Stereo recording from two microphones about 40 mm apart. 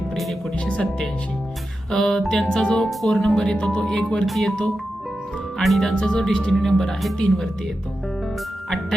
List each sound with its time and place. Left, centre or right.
0.6 s speech: left
1.9 s speech: centre
4.3 s speech: centre
5.6 s speech: centre
5.9 s speech: left